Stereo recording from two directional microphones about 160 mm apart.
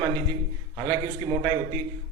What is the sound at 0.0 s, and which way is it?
A man's voice, 30° right (ahead or behind).